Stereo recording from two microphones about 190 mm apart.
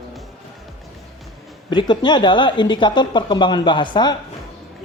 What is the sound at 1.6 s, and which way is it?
Speech, 25° left (ahead or behind).